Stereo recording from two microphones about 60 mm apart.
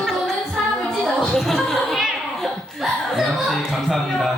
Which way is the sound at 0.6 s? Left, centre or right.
Centre.